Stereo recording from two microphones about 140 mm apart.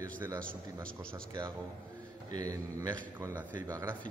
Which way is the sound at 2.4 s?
25° right (ahead or behind).